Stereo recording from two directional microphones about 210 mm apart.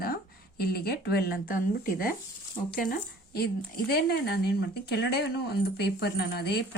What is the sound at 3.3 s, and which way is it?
Speech, 50° left (ahead or behind).